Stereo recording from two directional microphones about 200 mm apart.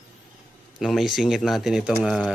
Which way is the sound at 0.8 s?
Centre (ahead or behind).